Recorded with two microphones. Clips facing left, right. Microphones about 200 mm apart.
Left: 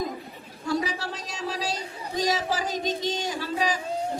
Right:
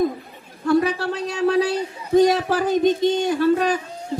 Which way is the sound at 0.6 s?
60° right (ahead or behind).